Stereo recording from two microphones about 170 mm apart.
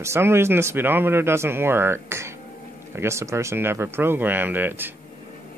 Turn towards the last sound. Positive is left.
turn(degrees=-10)  # may be behind; listen again after turning